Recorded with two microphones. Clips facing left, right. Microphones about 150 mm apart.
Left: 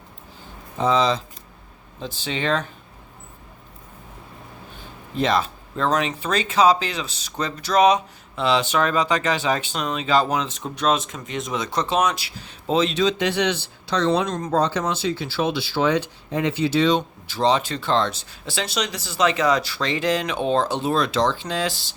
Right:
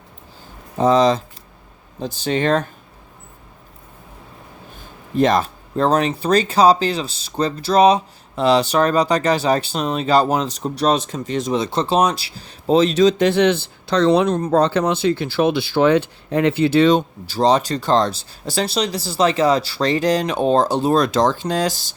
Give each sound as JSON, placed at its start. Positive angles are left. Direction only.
{"t": 0.8, "sound": "speech", "side_deg": -45}
{"t": 5.1, "sound": "speech", "side_deg": -45}
{"t": 17.2, "sound": "speech", "side_deg": -40}